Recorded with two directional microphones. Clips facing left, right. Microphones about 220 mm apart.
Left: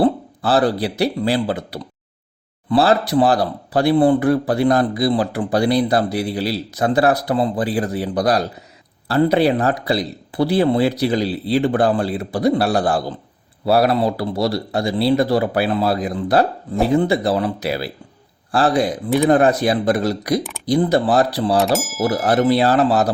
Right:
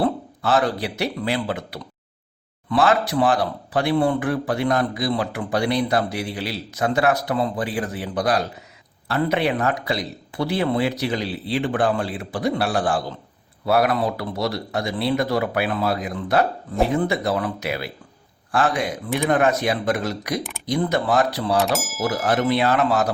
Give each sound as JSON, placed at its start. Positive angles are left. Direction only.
{"t": 0.0, "sound": "speech", "side_deg": 35}
{"t": 21.6, "sound": "speech", "side_deg": 0}
{"t": 22.0, "sound": "speech", "side_deg": 35}